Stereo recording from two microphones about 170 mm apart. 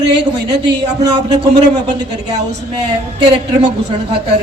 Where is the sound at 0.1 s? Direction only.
80° right.